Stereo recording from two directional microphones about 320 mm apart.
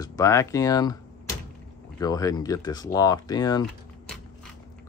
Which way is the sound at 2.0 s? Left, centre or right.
Centre.